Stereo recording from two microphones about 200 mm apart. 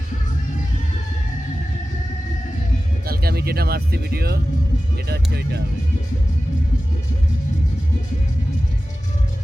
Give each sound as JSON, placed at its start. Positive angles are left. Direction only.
{"t": 3.1, "sound": "speech", "side_deg": -50}